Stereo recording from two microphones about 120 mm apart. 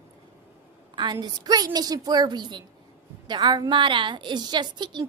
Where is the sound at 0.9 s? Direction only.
35° right (ahead or behind).